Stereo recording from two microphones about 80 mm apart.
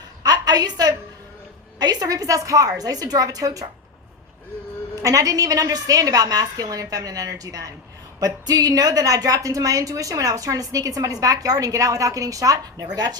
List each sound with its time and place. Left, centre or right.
0.2 s a sound: right
1.8 s a woman's voice: right
5.0 s a woman's voice: right